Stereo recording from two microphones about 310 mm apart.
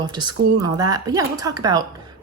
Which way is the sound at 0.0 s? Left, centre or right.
Centre.